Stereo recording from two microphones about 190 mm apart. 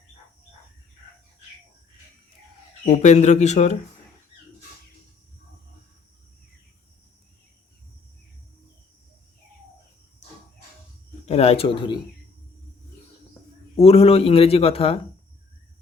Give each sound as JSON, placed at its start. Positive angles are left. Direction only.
{"t": 2.8, "sound": "a man's voice", "side_deg": 35}
{"t": 11.3, "sound": "speech", "side_deg": 35}
{"t": 13.7, "sound": "a man's voice", "side_deg": 30}